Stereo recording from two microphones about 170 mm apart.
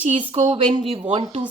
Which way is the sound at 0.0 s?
35° right (ahead or behind).